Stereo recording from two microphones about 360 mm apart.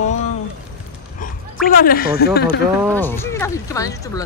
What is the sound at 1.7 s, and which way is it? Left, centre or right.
Speech, left.